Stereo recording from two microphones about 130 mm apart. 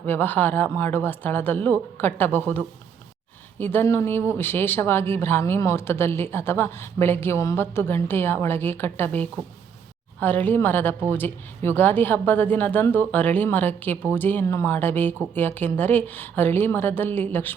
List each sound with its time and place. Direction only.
0.0 s speech: 15° left (ahead or behind)
3.6 s speech: 15° left (ahead or behind)